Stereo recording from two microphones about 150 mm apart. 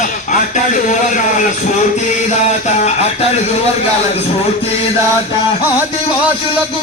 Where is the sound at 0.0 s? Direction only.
60° left (ahead or behind).